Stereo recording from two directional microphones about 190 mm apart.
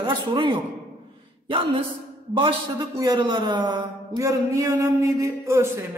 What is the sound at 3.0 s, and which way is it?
A man's voice, 20° right (ahead or behind).